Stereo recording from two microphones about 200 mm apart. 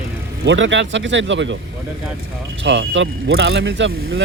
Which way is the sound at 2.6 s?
65° right (ahead or behind).